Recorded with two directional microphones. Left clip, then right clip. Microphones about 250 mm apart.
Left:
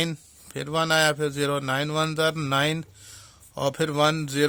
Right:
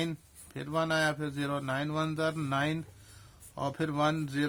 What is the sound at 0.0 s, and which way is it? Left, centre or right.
Speech, left.